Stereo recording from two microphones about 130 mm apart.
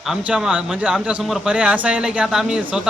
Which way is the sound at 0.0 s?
5° right (ahead or behind).